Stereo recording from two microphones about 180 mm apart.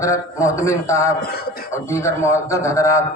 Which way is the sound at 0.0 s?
15° left (ahead or behind).